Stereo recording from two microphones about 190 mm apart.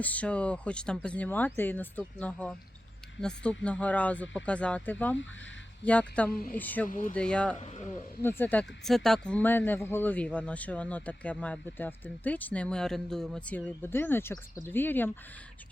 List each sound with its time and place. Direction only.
0.0 s speech: 10° left (ahead or behind)
6.8 s speech: 45° left (ahead or behind)
7.2 s speech: 5° left (ahead or behind)
7.6 s speech: 35° left (ahead or behind)
8.2 s speech: 10° left (ahead or behind)